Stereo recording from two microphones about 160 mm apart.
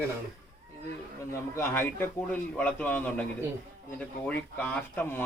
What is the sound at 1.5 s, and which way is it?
Speech, 15° left (ahead or behind).